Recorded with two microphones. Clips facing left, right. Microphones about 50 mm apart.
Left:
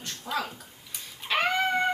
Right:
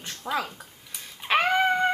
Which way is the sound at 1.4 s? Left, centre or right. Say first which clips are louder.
Right 3 dB; centre.